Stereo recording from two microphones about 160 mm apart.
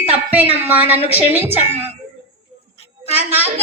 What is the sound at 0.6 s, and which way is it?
A woman's voice, 10° right (ahead or behind).